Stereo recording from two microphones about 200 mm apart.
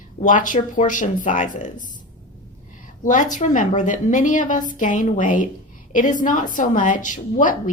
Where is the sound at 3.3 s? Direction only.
40° left (ahead or behind).